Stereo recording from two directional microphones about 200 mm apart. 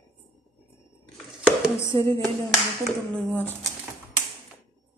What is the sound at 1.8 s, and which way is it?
Speech, 15° left (ahead or behind).